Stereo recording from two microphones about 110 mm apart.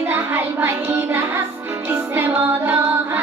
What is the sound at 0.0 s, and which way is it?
Music, 20° right (ahead or behind).